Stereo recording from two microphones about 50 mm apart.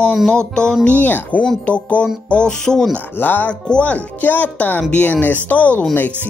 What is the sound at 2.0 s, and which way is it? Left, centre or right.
Music, centre.